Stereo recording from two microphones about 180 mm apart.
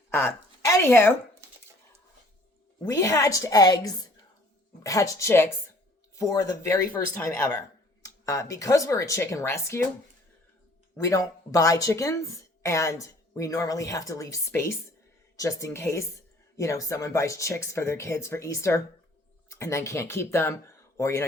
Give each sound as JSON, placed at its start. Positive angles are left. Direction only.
{"t": 0.1, "sound": "a sound", "side_deg": 15}
{"t": 2.8, "sound": "a woman's voice", "side_deg": 20}
{"t": 10.9, "sound": "speech", "side_deg": 20}